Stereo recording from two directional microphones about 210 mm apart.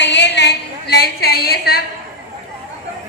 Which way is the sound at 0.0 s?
55° left (ahead or behind).